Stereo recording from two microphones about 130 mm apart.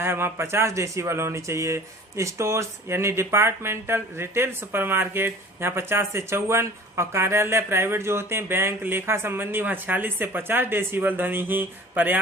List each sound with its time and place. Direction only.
0.0 s speech: 20° right (ahead or behind)